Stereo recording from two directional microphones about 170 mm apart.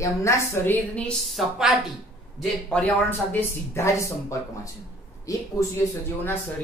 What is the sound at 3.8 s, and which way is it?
Speech, 15° left (ahead or behind).